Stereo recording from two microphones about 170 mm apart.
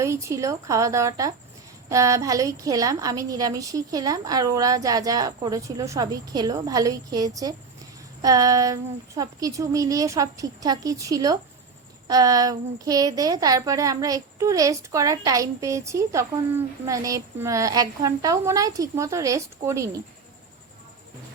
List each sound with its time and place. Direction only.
0.0 s speech: 15° right (ahead or behind)